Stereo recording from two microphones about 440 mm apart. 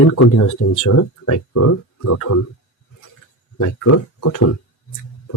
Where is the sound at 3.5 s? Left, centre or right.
Left.